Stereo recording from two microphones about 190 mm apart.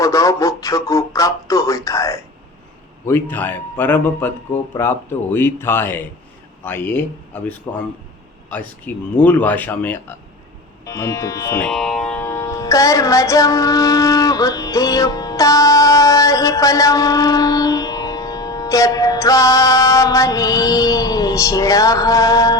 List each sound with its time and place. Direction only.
0.0 s music: 15° left (ahead or behind)
11.7 s music: centre (ahead or behind); by 22.5 s 15° left (ahead or behind)